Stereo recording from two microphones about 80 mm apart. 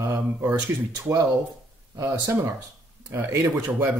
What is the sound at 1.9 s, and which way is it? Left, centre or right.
Speech, right.